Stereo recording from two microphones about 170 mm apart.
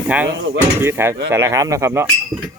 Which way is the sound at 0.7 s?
15° right (ahead or behind).